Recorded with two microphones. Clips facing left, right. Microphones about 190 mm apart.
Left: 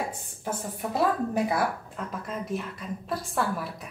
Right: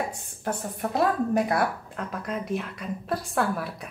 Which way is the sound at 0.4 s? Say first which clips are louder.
Right 3 dB; centre (ahead or behind).